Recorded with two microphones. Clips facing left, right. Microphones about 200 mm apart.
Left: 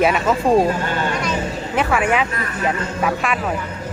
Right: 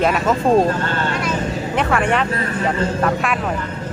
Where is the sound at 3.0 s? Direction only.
5° left (ahead or behind).